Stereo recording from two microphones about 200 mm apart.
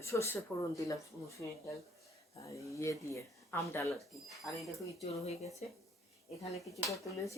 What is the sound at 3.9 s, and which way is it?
Speech, centre (ahead or behind).